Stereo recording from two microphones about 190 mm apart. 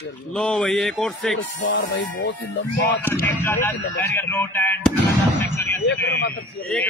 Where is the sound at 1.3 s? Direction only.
80° left.